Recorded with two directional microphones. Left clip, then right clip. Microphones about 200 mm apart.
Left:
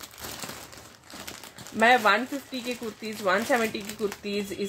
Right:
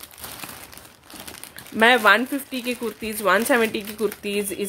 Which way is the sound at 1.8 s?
40° right (ahead or behind).